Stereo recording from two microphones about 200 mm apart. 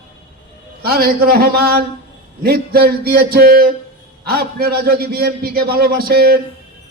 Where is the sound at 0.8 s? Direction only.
50° right (ahead or behind).